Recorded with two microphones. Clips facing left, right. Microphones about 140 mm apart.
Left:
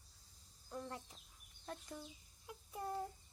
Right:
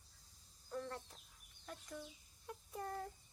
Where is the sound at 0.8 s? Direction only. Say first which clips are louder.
Right 2 dB; 10° left (ahead or behind).